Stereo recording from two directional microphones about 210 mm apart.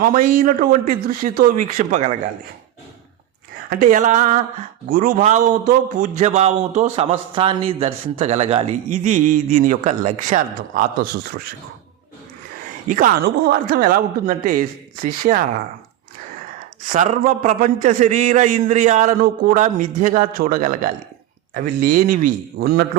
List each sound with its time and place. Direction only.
0.0 s a man's voice: 40° right (ahead or behind)
3.7 s a man's voice: 40° right (ahead or behind)
12.5 s a man's voice: 40° right (ahead or behind)
16.8 s a man's voice: 35° right (ahead or behind)